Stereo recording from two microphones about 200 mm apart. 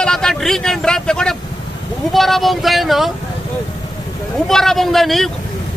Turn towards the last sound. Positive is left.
turn(degrees=0)  # may be behind; listen again after turning